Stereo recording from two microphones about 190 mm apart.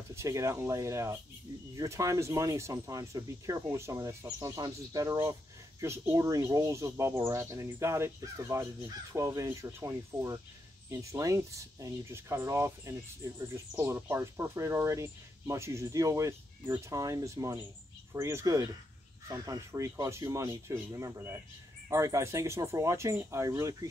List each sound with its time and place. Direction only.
0.1 s speech: 15° right (ahead or behind)